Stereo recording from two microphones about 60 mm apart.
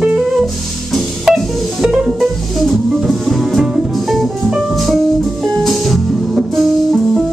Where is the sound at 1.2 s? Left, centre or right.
Centre.